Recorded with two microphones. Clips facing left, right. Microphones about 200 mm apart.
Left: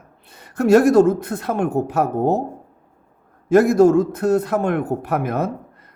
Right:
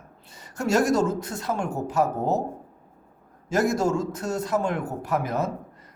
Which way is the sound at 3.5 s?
60° left (ahead or behind).